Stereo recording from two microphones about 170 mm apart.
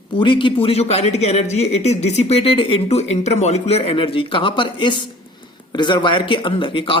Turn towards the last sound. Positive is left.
turn(degrees=30)  # may be behind; listen again after turning